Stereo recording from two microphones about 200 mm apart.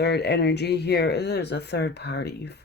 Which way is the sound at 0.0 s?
55° left (ahead or behind).